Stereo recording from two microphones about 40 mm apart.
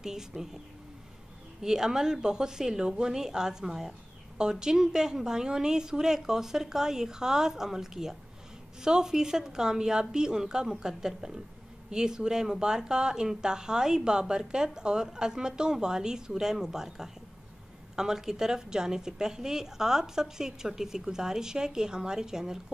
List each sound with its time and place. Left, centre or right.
0.0 s a woman's voice: centre
1.6 s a woman's voice: centre